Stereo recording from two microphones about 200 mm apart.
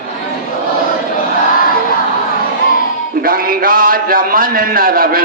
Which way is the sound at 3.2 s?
45° right (ahead or behind).